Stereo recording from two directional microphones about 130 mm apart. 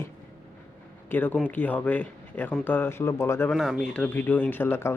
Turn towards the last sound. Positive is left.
turn(degrees=15)  # may be behind; listen again after turning